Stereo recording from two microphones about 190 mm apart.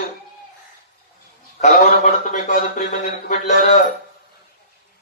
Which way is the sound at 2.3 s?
40° left (ahead or behind).